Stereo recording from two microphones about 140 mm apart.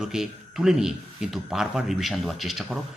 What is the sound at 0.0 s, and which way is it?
A man's voice, 5° right (ahead or behind).